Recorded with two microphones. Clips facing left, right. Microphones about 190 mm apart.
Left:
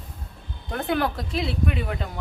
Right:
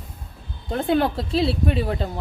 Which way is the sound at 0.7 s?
25° right (ahead or behind).